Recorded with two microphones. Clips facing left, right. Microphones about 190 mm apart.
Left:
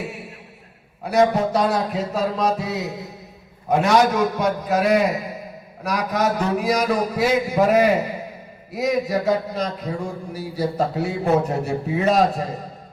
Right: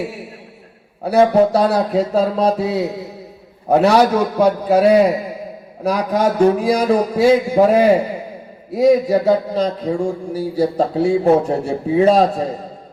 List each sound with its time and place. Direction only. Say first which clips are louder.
1.0 s speech: right 5 dB; 30° right (ahead or behind)